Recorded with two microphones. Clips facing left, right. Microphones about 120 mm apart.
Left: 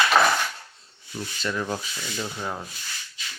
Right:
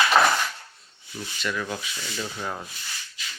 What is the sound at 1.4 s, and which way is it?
Speech, 30° left (ahead or behind).